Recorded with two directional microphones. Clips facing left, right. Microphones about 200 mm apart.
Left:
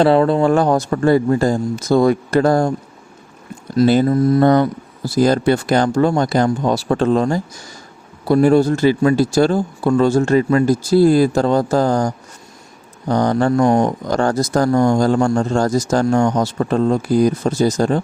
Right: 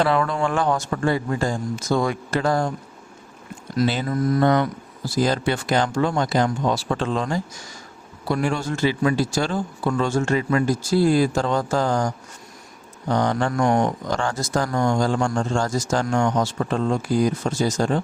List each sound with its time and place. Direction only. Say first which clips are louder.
0.0 s speech: left 8 dB; 30° left (ahead or behind)
4.0 s speech: left 7 dB; 30° left (ahead or behind)